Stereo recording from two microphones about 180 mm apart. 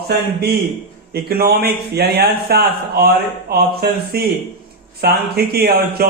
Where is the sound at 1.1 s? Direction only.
60° right (ahead or behind).